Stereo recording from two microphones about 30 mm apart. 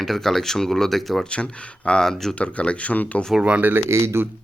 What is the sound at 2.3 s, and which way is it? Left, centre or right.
Speech, left.